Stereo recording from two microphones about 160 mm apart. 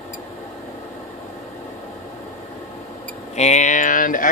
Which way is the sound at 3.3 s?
45° left (ahead or behind).